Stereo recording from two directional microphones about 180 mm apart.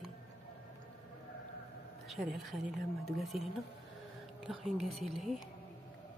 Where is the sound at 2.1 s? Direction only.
Centre (ahead or behind).